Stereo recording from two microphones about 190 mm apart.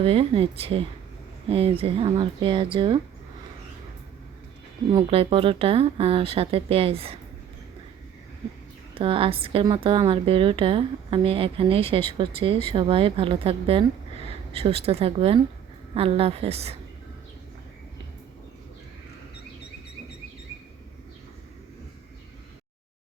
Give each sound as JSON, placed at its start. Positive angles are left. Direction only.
{"t": 0.0, "sound": "a woman's voice", "side_deg": -30}
{"t": 4.9, "sound": "a woman's voice", "side_deg": -30}
{"t": 9.0, "sound": "a woman's voice", "side_deg": -30}